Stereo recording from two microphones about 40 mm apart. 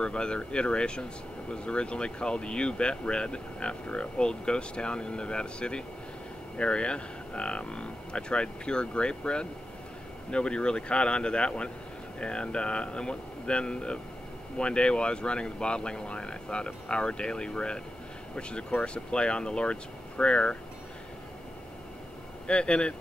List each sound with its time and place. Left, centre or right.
0.0 s speech: left
22.5 s speech: left